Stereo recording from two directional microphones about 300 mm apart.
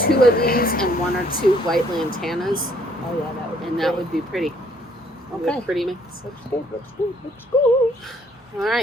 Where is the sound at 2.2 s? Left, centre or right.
Centre.